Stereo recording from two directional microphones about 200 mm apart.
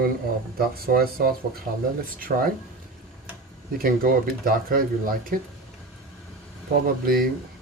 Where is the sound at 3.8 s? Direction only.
45° right (ahead or behind).